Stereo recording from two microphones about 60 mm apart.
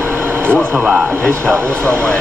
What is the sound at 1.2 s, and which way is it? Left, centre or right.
Speech, centre.